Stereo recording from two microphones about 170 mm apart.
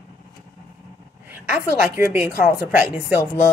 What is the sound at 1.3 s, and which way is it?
A woman's voice, 15° right (ahead or behind).